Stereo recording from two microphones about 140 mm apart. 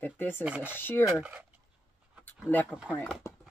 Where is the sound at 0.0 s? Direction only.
15° left (ahead or behind).